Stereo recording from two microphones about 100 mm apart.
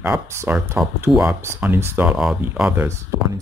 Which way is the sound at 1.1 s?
5° right (ahead or behind).